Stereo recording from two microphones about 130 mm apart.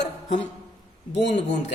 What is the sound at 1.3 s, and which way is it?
Speech, 60° left (ahead or behind).